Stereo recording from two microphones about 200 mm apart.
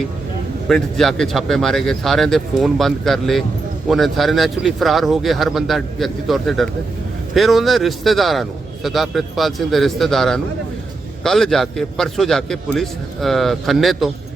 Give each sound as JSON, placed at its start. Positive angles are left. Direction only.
{"t": 0.7, "sound": "a man's voice", "side_deg": 0}